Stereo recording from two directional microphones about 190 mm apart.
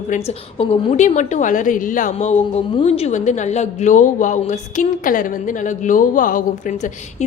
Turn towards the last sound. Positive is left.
turn(degrees=45)  # may be behind; listen again after turning